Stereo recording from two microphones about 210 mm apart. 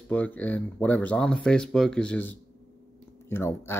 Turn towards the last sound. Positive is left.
turn(degrees=10)  # may be behind; listen again after turning